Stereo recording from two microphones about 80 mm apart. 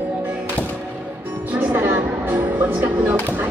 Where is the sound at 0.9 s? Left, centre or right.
Right.